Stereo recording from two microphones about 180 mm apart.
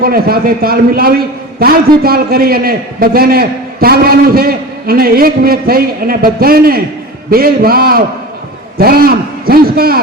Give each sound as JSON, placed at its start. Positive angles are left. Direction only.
{"t": 0.0, "sound": "a man's voice", "side_deg": -55}